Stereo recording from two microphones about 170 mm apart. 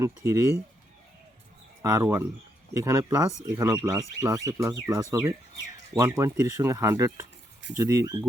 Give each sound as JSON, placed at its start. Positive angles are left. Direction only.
{"t": 0.0, "sound": "speech", "side_deg": -20}
{"t": 1.8, "sound": "speech", "side_deg": -20}